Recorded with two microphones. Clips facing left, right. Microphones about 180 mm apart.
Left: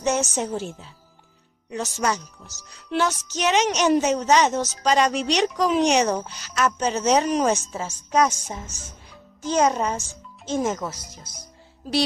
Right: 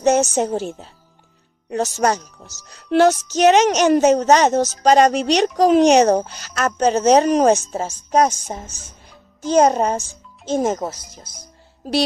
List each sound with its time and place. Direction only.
0.0 s speech: 45° right (ahead or behind)